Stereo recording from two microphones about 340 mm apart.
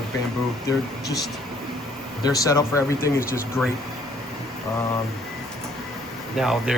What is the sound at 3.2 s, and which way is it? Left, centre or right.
Speech, left.